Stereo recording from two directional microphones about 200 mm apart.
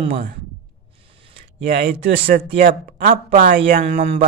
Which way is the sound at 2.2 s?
45° right (ahead or behind).